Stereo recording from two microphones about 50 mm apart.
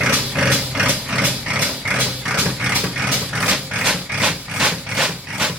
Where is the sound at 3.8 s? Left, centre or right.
Centre.